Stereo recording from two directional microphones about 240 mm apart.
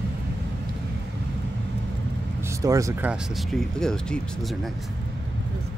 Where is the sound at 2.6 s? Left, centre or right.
Centre.